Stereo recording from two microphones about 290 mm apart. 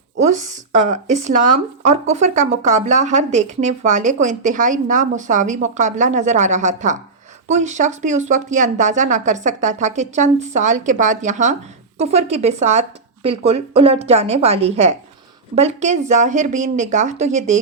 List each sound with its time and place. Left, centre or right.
0.2 s a woman's voice: right